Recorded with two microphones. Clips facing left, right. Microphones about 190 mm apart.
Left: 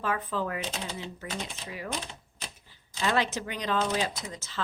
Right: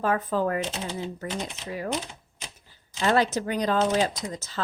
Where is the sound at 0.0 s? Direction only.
40° right (ahead or behind).